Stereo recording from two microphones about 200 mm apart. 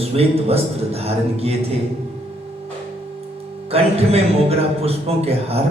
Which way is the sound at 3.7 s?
30° right (ahead or behind).